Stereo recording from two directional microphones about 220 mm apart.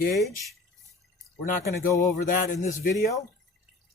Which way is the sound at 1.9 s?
15° left (ahead or behind).